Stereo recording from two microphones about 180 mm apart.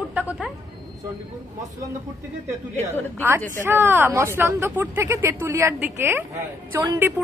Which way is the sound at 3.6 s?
15° right (ahead or behind).